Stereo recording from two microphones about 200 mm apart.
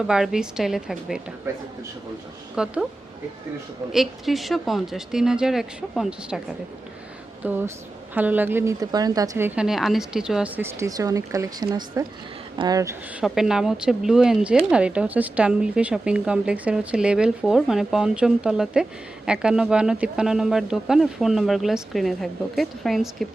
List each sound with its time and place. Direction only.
0.1 s speech: 5° right (ahead or behind)
2.6 s speech: 5° right (ahead or behind)
3.9 s speech: centre (ahead or behind)
7.4 s a woman's voice: 10° right (ahead or behind)
9.6 s a woman's voice: centre (ahead or behind)
13.2 s speech: centre (ahead or behind)